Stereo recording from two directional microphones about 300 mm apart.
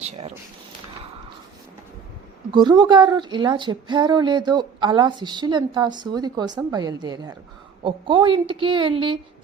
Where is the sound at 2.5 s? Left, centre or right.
Centre.